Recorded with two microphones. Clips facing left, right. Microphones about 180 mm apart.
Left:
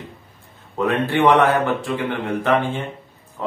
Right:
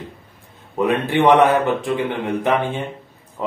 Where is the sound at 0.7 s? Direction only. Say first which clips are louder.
Right 1 dB; 15° right (ahead or behind).